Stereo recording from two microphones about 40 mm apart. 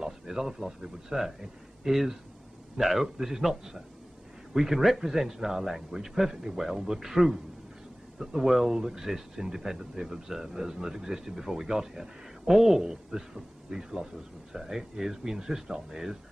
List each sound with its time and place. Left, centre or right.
0.0 s speech: centre
8.5 s speech: centre
8.7 s speech: centre